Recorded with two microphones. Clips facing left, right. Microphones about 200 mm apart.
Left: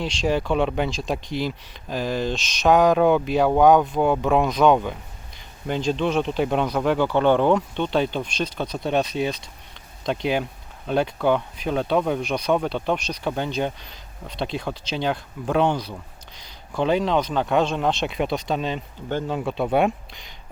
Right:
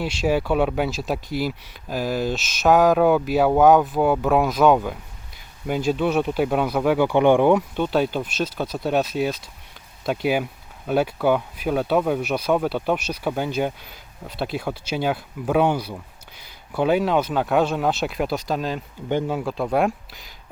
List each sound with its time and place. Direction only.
0.0 s speech: 5° right (ahead or behind)
19.0 s speech: 15° right (ahead or behind)
19.4 s speech: centre (ahead or behind)